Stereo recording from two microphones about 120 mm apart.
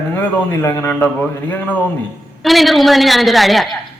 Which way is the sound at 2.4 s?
Centre (ahead or behind).